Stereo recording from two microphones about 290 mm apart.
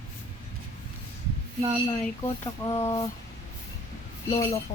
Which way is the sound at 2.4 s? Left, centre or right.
Centre.